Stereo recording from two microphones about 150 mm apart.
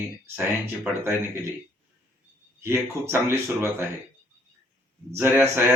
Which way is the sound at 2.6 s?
15° right (ahead or behind).